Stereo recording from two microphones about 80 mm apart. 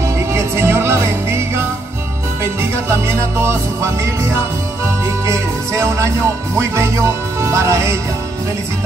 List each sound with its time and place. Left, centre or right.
0.3 s music: right